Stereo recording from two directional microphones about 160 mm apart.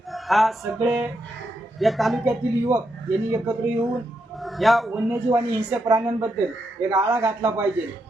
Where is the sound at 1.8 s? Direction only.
Centre (ahead or behind).